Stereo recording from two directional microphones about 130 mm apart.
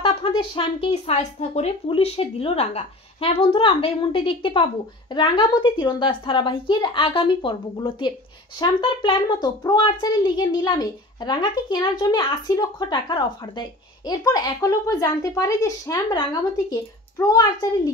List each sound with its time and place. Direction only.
0.0 s a woman's voice: 45° left (ahead or behind); by 17.9 s 30° left (ahead or behind)